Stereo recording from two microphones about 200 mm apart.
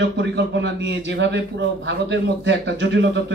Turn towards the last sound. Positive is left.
turn(degrees=-60)  # may be behind; listen again after turning